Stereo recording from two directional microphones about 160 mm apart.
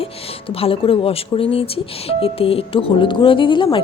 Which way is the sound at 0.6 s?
35° left (ahead or behind).